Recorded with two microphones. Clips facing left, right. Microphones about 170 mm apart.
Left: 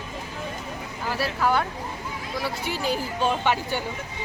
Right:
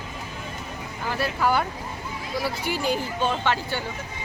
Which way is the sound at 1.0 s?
5° left (ahead or behind).